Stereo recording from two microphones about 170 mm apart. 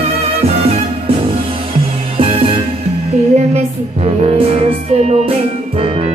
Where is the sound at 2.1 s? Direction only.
35° right (ahead or behind).